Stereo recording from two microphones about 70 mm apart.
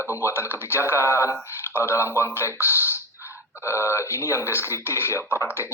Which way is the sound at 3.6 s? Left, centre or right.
Left.